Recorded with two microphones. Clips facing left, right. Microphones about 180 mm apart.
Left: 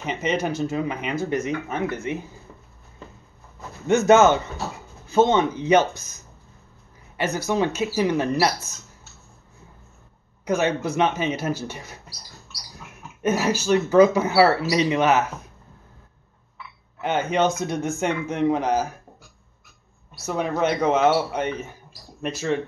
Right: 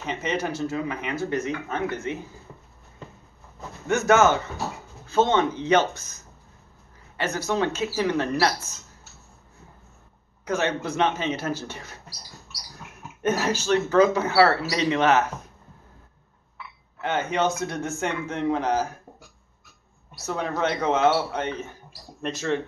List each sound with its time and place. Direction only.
0.0 s speech: 15° left (ahead or behind)
3.8 s speech: 20° left (ahead or behind)
10.4 s speech: 15° left (ahead or behind)
13.2 s speech: 10° left (ahead or behind)
17.0 s speech: 15° left (ahead or behind)
20.2 s speech: 15° left (ahead or behind)